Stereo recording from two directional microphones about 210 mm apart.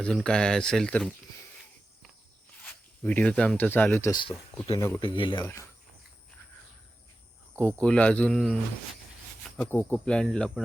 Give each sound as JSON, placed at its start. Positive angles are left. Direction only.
{"t": 0.0, "sound": "speech", "side_deg": 5}
{"t": 3.0, "sound": "speech", "side_deg": 10}
{"t": 7.6, "sound": "speech", "side_deg": 5}
{"t": 9.6, "sound": "speech", "side_deg": 10}